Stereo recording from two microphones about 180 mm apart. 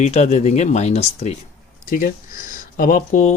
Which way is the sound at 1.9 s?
50° left (ahead or behind).